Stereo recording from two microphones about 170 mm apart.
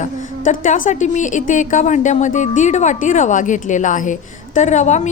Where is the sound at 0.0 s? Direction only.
50° left (ahead or behind).